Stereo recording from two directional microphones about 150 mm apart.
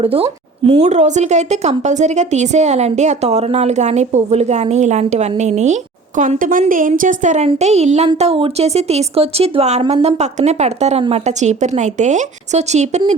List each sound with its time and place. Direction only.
0.0 s a woman's voice: 40° right (ahead or behind)
6.1 s a woman's voice: 60° right (ahead or behind)